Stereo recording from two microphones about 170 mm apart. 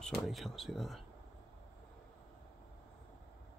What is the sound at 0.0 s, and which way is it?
Speech, centre (ahead or behind).